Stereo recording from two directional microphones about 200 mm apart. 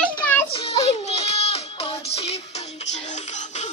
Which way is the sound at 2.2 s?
30° left (ahead or behind).